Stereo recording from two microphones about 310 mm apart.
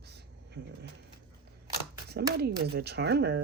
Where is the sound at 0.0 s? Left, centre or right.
Right.